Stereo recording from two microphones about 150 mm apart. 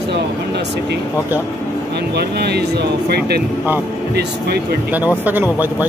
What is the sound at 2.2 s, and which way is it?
Speech, 90° right.